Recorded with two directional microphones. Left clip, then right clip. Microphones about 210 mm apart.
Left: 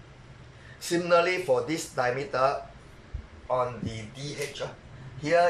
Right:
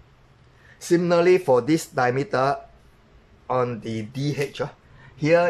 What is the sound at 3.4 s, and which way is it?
Speech, 45° right (ahead or behind).